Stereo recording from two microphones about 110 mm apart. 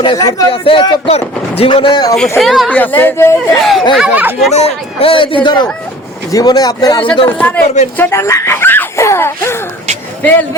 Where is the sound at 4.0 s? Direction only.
15° right (ahead or behind).